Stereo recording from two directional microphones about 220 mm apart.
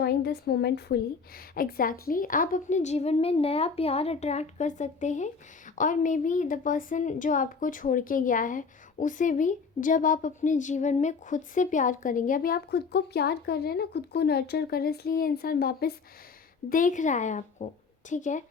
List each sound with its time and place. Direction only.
0.0 s a woman's voice: 45° left (ahead or behind)